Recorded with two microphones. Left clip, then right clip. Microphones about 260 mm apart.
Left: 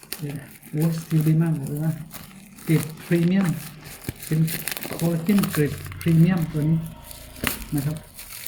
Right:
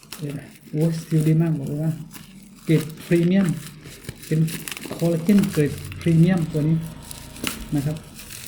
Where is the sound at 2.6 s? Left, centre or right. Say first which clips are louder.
Right 3 dB; centre.